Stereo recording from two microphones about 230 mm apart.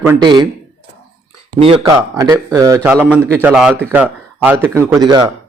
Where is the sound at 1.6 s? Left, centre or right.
Centre.